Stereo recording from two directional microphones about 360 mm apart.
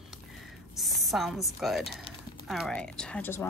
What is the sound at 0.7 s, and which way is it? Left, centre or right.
Speech, centre.